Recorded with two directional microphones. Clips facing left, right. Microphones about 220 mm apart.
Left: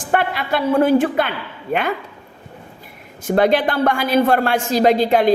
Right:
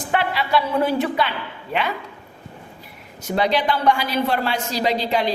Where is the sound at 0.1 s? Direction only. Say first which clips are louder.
Left 2 dB; 50° left (ahead or behind).